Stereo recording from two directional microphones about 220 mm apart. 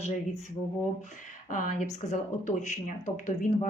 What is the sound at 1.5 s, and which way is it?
Speech, 35° left (ahead or behind).